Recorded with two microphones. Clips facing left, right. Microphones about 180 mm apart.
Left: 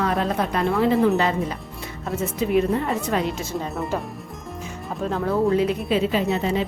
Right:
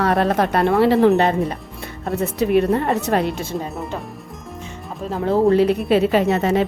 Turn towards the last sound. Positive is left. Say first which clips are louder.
# right 5 dB
turn(degrees=-65)  # may be behind; listen again after turning